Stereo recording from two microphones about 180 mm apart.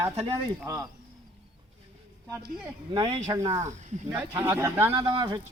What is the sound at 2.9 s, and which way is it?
Speech, 25° right (ahead or behind).